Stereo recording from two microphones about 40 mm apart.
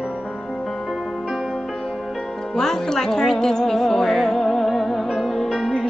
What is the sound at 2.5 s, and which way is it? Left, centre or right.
Music, centre.